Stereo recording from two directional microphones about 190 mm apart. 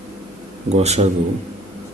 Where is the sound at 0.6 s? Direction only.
35° right (ahead or behind).